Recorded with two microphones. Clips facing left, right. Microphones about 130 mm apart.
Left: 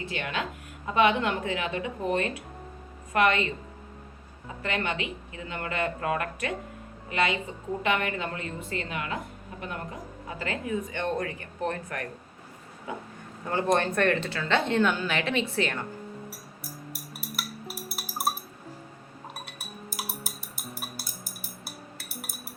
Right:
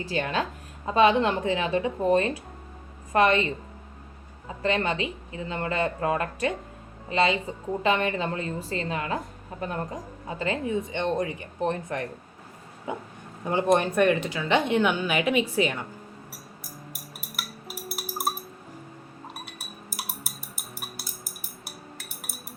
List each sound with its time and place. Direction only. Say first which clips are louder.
0.0 s a woman's voice: right 5 dB; 35° right (ahead or behind)
4.6 s a woman's voice: right 5 dB; 30° right (ahead or behind); by 15.8 s 10° right (ahead or behind)
17.8 s music: right 1 dB; centre (ahead or behind)